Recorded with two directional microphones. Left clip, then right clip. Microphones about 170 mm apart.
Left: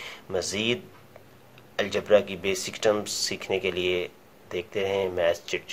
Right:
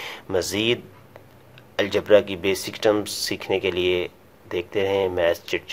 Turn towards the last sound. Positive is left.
turn(degrees=-35)  # may be behind; listen again after turning